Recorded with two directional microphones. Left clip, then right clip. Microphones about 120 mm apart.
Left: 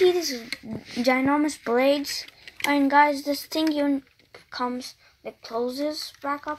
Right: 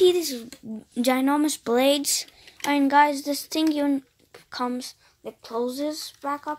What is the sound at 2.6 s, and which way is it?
Speech, 80° right.